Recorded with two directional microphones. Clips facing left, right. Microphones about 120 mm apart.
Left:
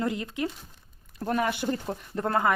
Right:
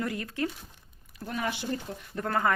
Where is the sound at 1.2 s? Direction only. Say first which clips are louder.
Left 6 dB; 50° left (ahead or behind).